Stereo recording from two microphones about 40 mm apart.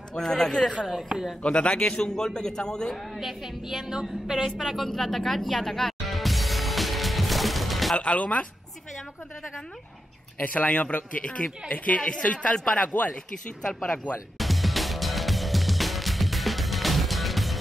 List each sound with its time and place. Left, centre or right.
0.1 s a man's voice: centre
0.8 s speech: centre
1.4 s a man's voice: left
2.9 s speech: centre
4.5 s music: centre
8.0 s speech: left
10.4 s speech: left
11.2 s speech: left
12.0 s speech: left
12.3 s speech: left
12.8 s speech: left
14.4 s music: centre